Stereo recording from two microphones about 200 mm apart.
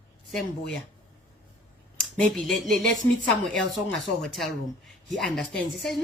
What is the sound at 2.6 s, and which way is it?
Speech, 45° right (ahead or behind).